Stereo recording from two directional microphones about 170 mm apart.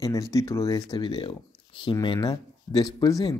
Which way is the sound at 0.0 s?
20° left (ahead or behind).